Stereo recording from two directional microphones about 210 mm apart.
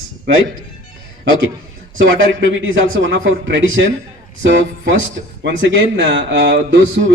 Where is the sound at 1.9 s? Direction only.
65° right (ahead or behind).